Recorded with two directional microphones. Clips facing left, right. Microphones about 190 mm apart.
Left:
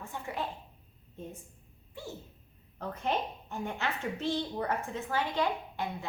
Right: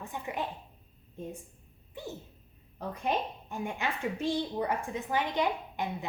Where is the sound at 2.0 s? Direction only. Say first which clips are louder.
Right 2 dB; 20° right (ahead or behind).